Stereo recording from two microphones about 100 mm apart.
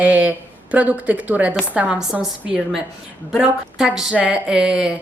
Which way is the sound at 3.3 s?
5° right (ahead or behind).